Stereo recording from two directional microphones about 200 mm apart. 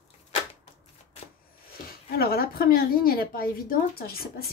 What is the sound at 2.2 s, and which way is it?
A woman's voice, 50° left (ahead or behind).